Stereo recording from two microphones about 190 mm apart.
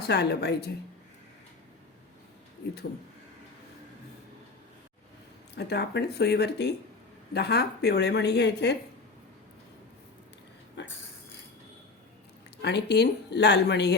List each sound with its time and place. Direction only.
0.1 s speech: 60° left (ahead or behind)
5.5 s speech: 60° left (ahead or behind)
10.8 s a sound: 70° left (ahead or behind)
12.6 s speech: 60° left (ahead or behind)